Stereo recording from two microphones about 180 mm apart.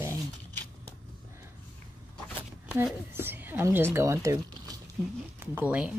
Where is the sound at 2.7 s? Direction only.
10° right (ahead or behind).